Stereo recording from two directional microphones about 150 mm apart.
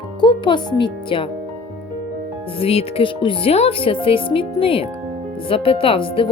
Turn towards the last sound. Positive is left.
turn(degrees=35)  # may be behind; listen again after turning